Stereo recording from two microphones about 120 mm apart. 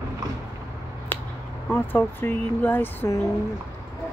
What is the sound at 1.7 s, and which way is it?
Speech, 15° left (ahead or behind).